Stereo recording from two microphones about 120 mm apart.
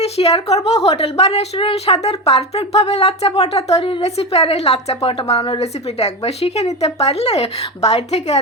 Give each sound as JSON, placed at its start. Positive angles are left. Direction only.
{"t": 0.0, "sound": "a woman's voice", "side_deg": 55}